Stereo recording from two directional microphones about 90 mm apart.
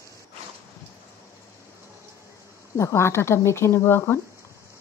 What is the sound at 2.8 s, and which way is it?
Speech, 30° left (ahead or behind).